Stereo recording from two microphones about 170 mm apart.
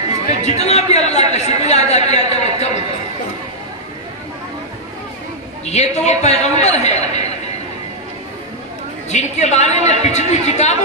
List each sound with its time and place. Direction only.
0.4 s a woman's voice: 40° left (ahead or behind)
1.9 s a sound: 40° left (ahead or behind)
5.7 s a woman's voice: 40° left (ahead or behind)
9.1 s a woman's voice: 40° left (ahead or behind)